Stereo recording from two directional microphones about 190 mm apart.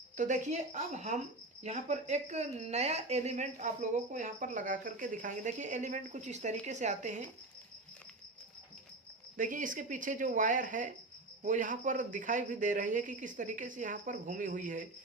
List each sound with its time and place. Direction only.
0.2 s a woman's voice: 40° right (ahead or behind)
9.4 s a man's voice: 45° right (ahead or behind)